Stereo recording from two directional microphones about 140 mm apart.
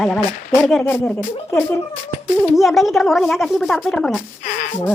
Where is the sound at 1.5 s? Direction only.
15° left (ahead or behind).